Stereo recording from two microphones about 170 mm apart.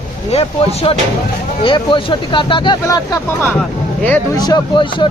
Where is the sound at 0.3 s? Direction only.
35° left (ahead or behind); by 3.2 s 20° left (ahead or behind).